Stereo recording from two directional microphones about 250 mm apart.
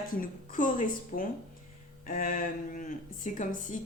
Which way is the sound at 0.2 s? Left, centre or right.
Left.